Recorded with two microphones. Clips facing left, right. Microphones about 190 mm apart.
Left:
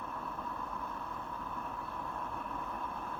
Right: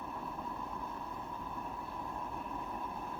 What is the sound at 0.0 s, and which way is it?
Vehicle, 15° right (ahead or behind).